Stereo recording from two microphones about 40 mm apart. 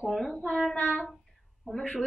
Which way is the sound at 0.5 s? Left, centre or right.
Centre.